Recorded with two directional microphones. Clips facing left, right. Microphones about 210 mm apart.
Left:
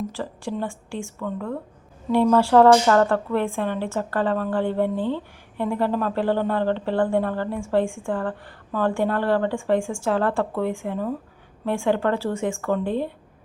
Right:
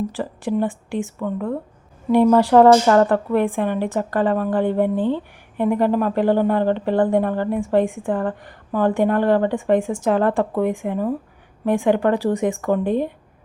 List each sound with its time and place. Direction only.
0.1 s a woman's voice: 15° right (ahead or behind)